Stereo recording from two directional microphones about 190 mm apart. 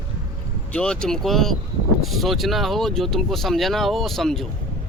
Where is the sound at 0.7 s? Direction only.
5° left (ahead or behind).